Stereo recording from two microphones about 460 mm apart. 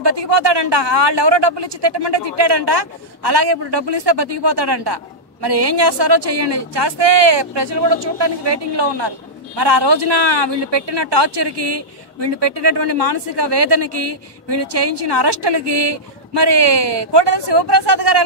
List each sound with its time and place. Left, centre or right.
0.0 s speech: right